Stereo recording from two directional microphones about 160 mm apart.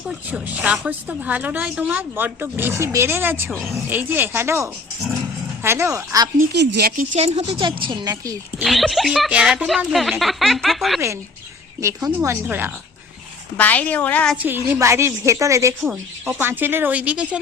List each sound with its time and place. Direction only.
0.0 s speech: 5° right (ahead or behind)
3.5 s speech: centre (ahead or behind)
3.8 s speech: 10° right (ahead or behind)
6.5 s speech: 90° right; by 8.6 s 20° right (ahead or behind)
8.6 s speech: centre (ahead or behind)
11.8 s speech: 20° right (ahead or behind)
13.6 s a woman's voice: 10° left (ahead or behind)
14.3 s speech: 10° right (ahead or behind)